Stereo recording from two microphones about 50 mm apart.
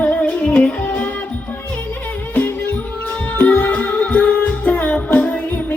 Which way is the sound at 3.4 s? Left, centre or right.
Left.